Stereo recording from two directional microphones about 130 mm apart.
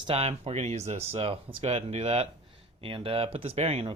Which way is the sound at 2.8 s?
45° right (ahead or behind).